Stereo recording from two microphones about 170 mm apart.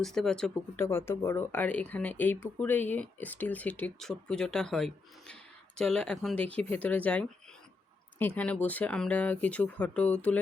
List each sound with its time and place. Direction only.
0.0 s speech: centre (ahead or behind)
0.9 s speech: 15° left (ahead or behind)